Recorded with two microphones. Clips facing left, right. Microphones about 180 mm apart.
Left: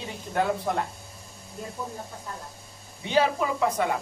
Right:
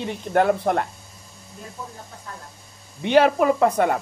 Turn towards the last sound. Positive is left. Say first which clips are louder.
# right 7 dB
turn(degrees=-55)  # may be behind; listen again after turning